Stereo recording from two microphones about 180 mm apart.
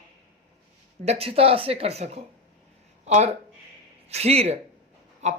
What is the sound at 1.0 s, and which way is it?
Speech, 35° right (ahead or behind).